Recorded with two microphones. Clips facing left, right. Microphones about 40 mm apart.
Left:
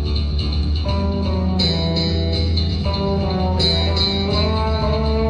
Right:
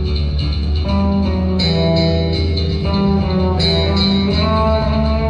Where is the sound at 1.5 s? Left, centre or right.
Centre.